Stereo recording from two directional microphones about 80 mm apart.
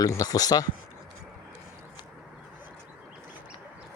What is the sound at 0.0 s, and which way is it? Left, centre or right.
Speech, left.